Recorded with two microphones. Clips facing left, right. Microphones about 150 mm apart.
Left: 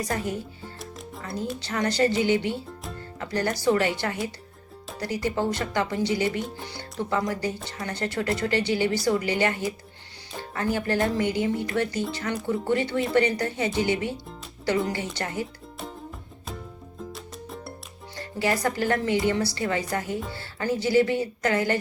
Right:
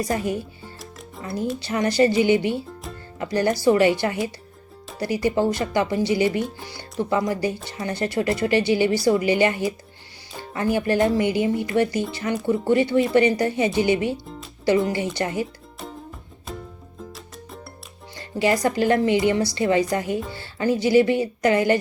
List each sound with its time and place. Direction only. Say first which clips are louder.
1.2 s speech: right 5 dB; 20° right (ahead or behind)
17.0 s music: left 1 dB; centre (ahead or behind)
18.3 s speech: right 5 dB; 15° right (ahead or behind)